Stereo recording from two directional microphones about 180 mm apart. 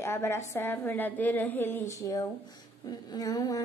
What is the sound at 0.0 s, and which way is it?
A woman's voice, 15° left (ahead or behind).